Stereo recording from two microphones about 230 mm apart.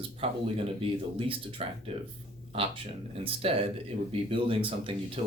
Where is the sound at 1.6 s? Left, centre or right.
Right.